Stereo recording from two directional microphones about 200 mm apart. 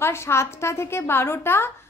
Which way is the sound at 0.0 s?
10° left (ahead or behind).